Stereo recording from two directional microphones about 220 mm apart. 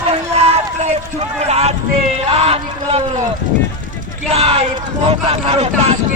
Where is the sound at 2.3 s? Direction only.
25° right (ahead or behind).